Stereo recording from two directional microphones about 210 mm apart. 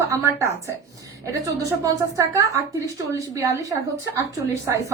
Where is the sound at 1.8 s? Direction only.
15° right (ahead or behind).